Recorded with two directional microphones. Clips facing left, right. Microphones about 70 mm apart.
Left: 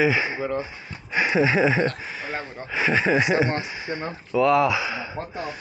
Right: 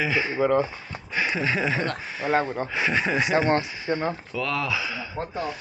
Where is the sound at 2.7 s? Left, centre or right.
Centre.